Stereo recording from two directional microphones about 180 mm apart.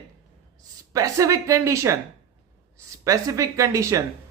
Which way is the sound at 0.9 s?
15° right (ahead or behind).